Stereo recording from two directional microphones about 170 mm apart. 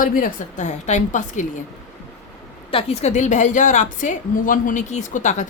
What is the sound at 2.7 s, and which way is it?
Speech, 40° left (ahead or behind).